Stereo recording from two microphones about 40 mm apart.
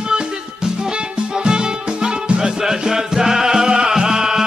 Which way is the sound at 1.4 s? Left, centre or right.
Centre.